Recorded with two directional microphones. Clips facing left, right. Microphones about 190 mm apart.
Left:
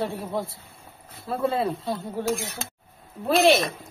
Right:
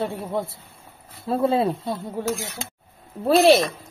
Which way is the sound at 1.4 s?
25° right (ahead or behind).